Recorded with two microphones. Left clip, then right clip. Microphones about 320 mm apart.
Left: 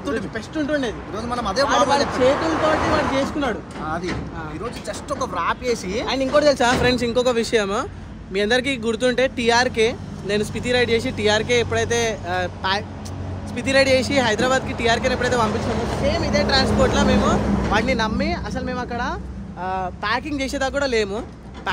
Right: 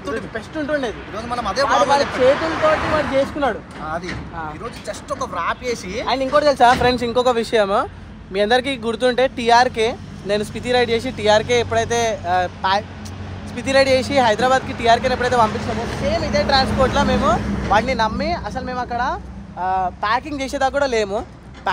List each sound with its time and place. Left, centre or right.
0.0 s speech: centre
2.7 s speech: left
3.8 s speech: centre
6.0 s speech: centre
15.5 s speech: left
16.1 s speech: centre
17.4 s speech: left
17.6 s speech: centre